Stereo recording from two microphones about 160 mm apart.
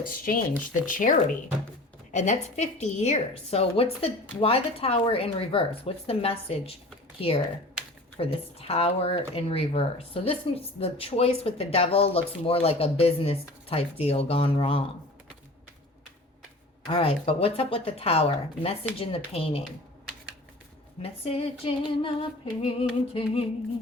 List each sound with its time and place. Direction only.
0.0 s speech: 60° left (ahead or behind); by 14.8 s 35° left (ahead or behind)
16.9 s speech: 35° left (ahead or behind)
21.0 s speech: 35° left (ahead or behind)